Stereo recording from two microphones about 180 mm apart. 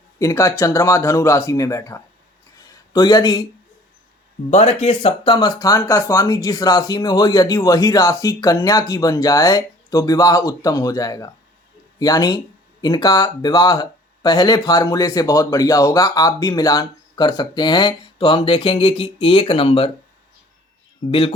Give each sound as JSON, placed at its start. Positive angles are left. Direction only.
{"t": 0.2, "sound": "speech", "side_deg": 15}
{"t": 2.6, "sound": "a sound", "side_deg": 20}
{"t": 4.5, "sound": "speech", "side_deg": 35}
{"t": 21.1, "sound": "speech", "side_deg": 30}